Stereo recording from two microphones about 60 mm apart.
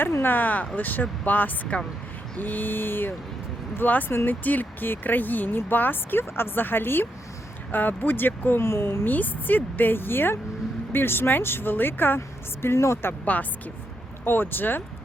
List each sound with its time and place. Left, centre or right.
0.0 s speech: left
4.1 s speech: left
4.4 s speech: left
9.1 s speech: left
12.6 s speech: left
13.3 s speech: left